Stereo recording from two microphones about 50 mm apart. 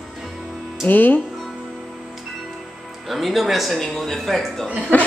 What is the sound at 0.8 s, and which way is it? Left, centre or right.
Speech, left.